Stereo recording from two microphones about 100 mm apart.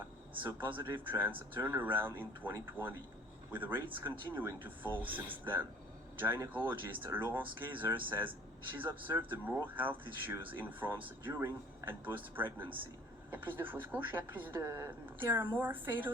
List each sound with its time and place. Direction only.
0.4 s speech: 20° right (ahead or behind)
14.7 s a woman's voice: 30° right (ahead or behind)
15.2 s speech: 20° right (ahead or behind)